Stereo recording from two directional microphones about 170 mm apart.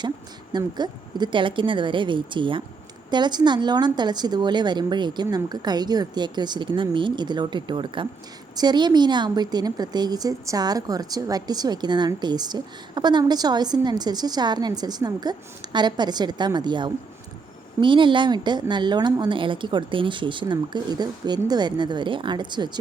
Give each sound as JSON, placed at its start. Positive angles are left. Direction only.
{"t": 0.5, "sound": "a woman's voice", "side_deg": -25}